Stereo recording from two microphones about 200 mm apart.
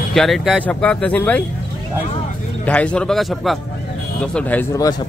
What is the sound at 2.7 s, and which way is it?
Speech, 5° left (ahead or behind).